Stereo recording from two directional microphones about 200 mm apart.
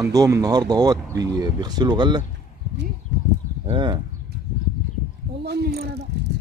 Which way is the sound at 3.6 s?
25° right (ahead or behind).